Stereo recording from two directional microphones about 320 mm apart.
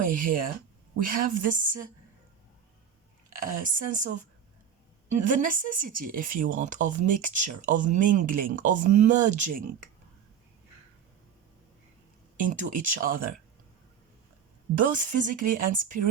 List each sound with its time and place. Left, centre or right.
0.0 s speech: right
3.4 s speech: right
12.4 s speech: right
15.1 s speech: right